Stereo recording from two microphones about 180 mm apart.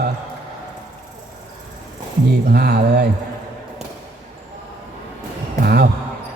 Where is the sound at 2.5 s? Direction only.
60° right (ahead or behind).